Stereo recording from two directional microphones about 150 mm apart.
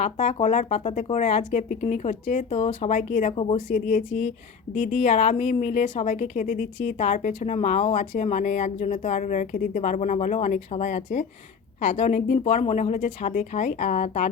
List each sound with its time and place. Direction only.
0.0 s speech: 45° left (ahead or behind)
3.3 s speech: 40° left (ahead or behind)
3.7 s speech: 60° left (ahead or behind)